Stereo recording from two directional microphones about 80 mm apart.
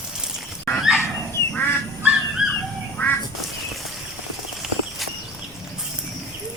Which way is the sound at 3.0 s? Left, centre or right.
Centre.